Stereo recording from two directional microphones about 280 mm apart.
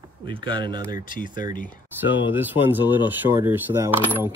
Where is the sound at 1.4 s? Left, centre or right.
Left.